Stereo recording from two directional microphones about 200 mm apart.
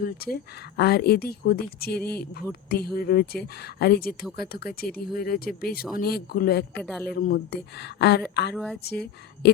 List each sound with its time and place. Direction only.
0.0 s speech: 50° left (ahead or behind)
6.7 s speech: centre (ahead or behind)
7.0 s speech: 50° left (ahead or behind)
8.5 s speech: 5° left (ahead or behind)
8.8 s speech: 55° left (ahead or behind)